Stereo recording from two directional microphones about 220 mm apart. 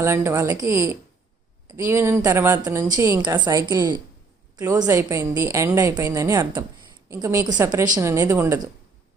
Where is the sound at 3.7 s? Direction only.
20° right (ahead or behind).